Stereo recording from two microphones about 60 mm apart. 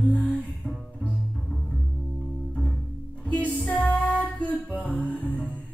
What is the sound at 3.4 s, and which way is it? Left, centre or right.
Music, left.